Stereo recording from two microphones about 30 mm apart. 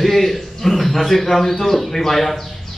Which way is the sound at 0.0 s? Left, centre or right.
Centre.